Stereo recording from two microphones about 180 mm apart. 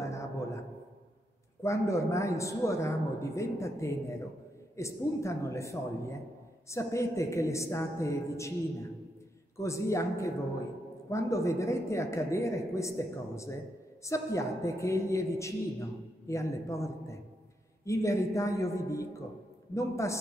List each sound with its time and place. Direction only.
0.0 s a sound: 15° left (ahead or behind)
1.6 s a woman's voice: 15° left (ahead or behind)
9.6 s a woman's voice: 15° left (ahead or behind)